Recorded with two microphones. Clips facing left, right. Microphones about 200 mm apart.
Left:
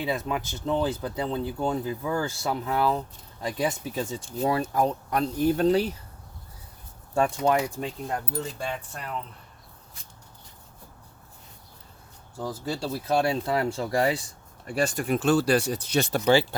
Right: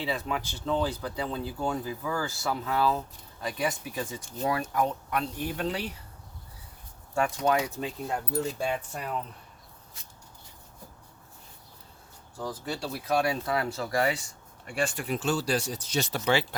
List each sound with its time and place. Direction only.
0.0 s speech: 20° left (ahead or behind); by 5.9 s 40° left (ahead or behind)
7.1 s speech: 30° left (ahead or behind)
8.0 s speech: 5° right (ahead or behind)
12.4 s speech: 25° left (ahead or behind); by 16.2 s 55° left (ahead or behind)
16.2 s speech: 30° left (ahead or behind)